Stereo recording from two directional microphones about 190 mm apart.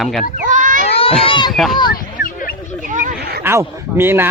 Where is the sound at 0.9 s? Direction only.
30° left (ahead or behind).